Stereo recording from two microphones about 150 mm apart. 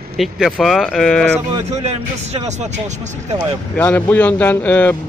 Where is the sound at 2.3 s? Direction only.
50° right (ahead or behind).